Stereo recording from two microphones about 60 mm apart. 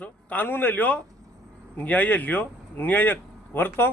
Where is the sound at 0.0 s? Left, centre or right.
Left.